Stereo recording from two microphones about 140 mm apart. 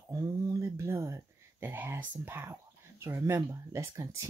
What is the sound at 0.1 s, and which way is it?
Speech, 25° right (ahead or behind).